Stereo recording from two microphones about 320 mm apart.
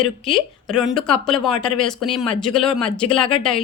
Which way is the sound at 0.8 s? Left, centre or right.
Centre.